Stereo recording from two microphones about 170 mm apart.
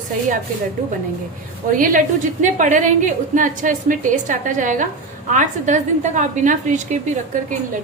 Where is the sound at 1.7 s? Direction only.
50° right (ahead or behind).